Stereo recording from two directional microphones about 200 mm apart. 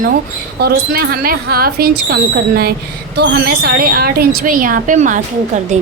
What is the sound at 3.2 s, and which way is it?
A woman's voice, 50° right (ahead or behind).